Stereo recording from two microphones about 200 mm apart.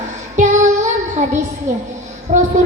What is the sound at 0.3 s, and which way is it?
Child singing, 35° right (ahead or behind).